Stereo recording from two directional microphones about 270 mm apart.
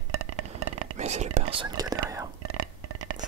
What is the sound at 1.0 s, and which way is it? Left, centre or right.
Whispering, right.